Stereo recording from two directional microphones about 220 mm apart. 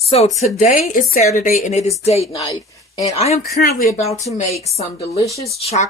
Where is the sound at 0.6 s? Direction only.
40° left (ahead or behind).